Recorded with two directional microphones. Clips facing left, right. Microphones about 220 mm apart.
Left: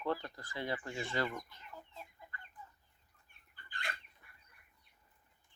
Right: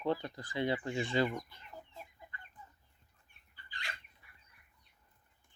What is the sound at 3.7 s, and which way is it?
Chicken, 55° left (ahead or behind).